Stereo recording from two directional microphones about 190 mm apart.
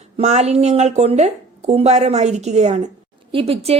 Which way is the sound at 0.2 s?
35° right (ahead or behind).